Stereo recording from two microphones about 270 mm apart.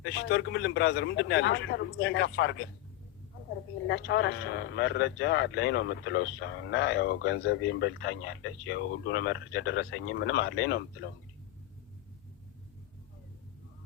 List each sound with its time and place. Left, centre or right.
0.0 s a man's voice: left
3.8 s a man's voice: left